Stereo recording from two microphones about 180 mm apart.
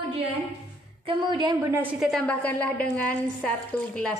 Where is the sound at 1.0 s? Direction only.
25° right (ahead or behind).